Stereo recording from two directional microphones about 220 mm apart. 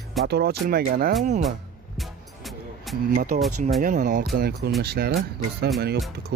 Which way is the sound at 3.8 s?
35° right (ahead or behind).